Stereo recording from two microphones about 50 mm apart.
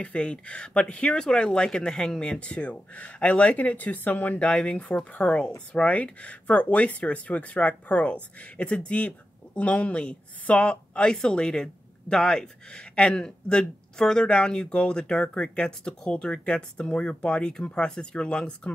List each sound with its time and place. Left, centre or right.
0.0 s speech: left
4.4 s speech: left